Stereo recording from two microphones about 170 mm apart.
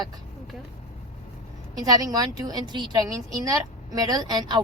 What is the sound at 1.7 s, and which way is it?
A woman's voice, 20° right (ahead or behind).